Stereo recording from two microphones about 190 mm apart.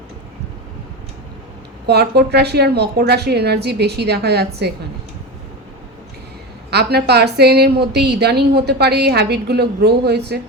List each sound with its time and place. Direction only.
1.9 s a woman's voice: 60° right (ahead or behind)
6.7 s a woman's voice: 60° right (ahead or behind)